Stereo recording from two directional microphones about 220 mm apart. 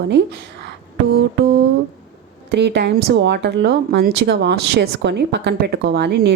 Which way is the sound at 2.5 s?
50° right (ahead or behind).